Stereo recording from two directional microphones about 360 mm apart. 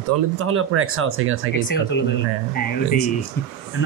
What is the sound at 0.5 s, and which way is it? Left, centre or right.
Speech, right.